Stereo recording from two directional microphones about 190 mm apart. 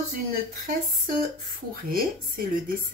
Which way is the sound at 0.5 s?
45° right (ahead or behind).